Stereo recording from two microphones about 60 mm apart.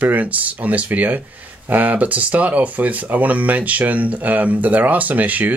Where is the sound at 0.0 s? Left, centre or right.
Right.